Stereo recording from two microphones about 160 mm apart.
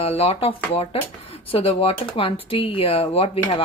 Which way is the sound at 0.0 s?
40° left (ahead or behind).